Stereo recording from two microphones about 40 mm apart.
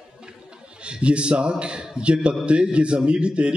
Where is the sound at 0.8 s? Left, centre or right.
Right.